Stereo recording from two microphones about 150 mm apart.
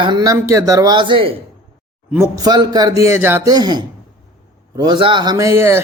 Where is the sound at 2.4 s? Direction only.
25° right (ahead or behind).